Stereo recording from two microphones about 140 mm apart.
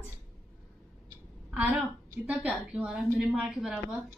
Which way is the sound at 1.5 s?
10° right (ahead or behind).